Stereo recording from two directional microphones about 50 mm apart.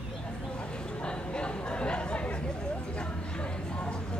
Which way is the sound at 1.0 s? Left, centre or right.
Centre.